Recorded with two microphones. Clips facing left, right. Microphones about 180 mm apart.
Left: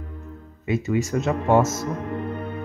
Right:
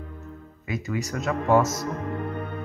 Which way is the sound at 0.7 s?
25° left (ahead or behind).